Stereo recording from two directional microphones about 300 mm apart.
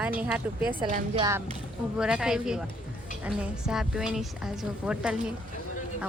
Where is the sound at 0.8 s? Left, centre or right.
Centre.